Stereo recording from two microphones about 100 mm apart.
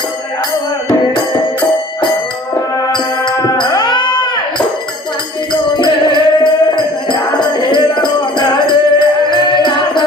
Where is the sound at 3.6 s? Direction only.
45° left (ahead or behind).